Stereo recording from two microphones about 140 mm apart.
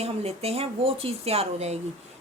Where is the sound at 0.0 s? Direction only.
45° right (ahead or behind).